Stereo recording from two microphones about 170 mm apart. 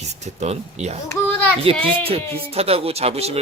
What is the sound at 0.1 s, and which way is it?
Speech, 40° right (ahead or behind).